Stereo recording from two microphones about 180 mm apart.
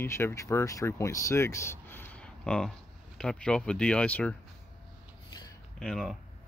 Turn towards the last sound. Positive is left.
turn(degrees=0)  # may be behind; listen again after turning